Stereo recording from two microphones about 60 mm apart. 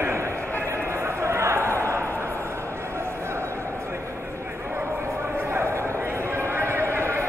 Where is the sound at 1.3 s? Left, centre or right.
Right.